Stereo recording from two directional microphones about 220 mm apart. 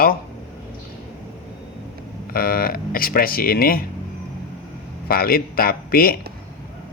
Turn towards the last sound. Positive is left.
turn(degrees=45)  # may be behind; listen again after turning